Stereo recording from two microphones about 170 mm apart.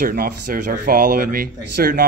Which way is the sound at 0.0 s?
55° right (ahead or behind).